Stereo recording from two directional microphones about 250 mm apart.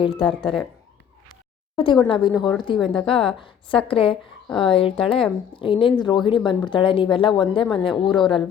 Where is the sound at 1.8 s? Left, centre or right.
Centre.